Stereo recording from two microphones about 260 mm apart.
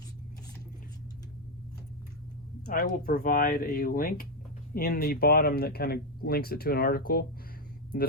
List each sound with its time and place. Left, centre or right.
2.6 s speech: left